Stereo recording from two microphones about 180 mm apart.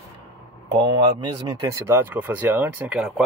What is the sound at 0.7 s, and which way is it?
Speech, 25° right (ahead or behind).